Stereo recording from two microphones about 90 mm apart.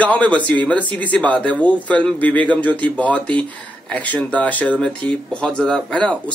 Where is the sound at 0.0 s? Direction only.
15° left (ahead or behind).